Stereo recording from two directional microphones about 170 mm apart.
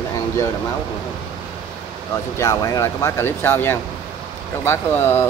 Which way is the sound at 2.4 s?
20° left (ahead or behind).